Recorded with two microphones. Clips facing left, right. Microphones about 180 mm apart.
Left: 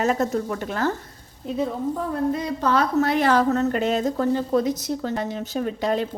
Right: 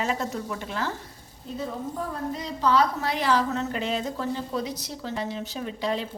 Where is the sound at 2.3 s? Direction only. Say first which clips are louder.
Left 2 dB; 55° left (ahead or behind).